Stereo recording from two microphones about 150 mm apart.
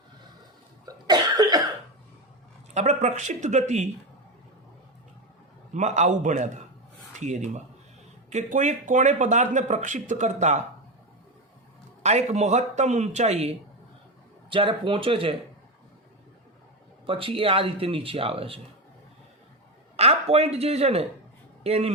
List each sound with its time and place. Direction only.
0.9 s cough: 25° right (ahead or behind)
2.7 s speech: 50° right (ahead or behind)
5.7 s a man's voice: 55° right (ahead or behind)
12.0 s speech: 45° right (ahead or behind)
14.5 s speech: 35° right (ahead or behind)
17.1 s speech: 35° right (ahead or behind)
20.0 s speech: 45° right (ahead or behind)